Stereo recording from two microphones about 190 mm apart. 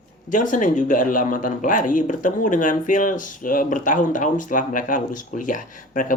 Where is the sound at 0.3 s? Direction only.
45° left (ahead or behind).